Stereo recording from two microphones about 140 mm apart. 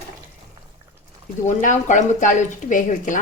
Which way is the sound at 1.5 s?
60° left (ahead or behind).